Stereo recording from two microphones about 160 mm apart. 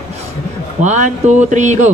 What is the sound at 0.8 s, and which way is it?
Speech, 45° right (ahead or behind).